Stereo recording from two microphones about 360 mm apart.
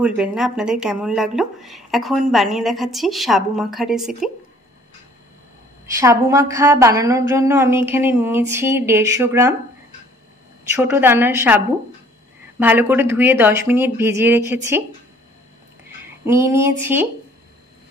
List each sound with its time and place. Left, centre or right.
0.0 s speech: centre
5.9 s a woman's voice: centre
10.8 s speech: centre
16.3 s a woman's voice: centre